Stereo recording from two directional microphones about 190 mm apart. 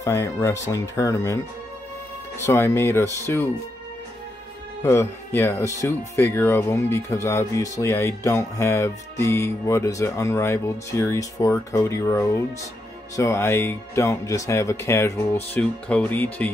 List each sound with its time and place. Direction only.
0.0 s speech: 15° left (ahead or behind)
4.8 s speech: 10° left (ahead or behind)